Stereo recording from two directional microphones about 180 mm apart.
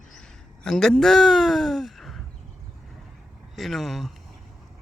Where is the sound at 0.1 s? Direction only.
5° left (ahead or behind).